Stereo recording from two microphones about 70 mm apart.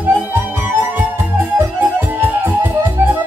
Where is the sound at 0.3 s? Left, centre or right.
Right.